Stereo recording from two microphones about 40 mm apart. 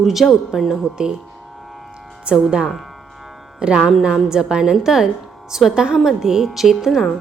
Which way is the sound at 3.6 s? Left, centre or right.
Right.